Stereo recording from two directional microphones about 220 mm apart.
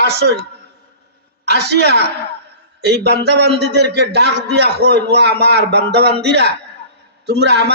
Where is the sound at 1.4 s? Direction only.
50° right (ahead or behind).